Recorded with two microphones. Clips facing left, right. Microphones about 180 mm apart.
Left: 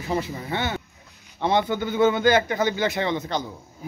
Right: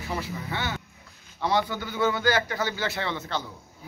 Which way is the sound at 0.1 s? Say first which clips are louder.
Left 6 dB; 20° left (ahead or behind).